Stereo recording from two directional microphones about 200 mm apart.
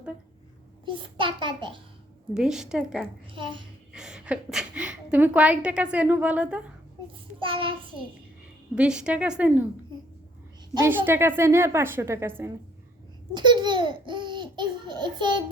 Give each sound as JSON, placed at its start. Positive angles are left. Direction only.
{"t": 0.9, "sound": "laughter", "side_deg": -25}
{"t": 2.3, "sound": "a woman's voice", "side_deg": -5}
{"t": 3.3, "sound": "laughter", "side_deg": -25}
{"t": 3.9, "sound": "a woman's voice", "side_deg": -5}
{"t": 7.3, "sound": "laughter", "side_deg": -25}
{"t": 8.7, "sound": "a woman's voice", "side_deg": -5}
{"t": 10.8, "sound": "a woman's voice", "side_deg": -10}
{"t": 13.3, "sound": "laughter", "side_deg": -20}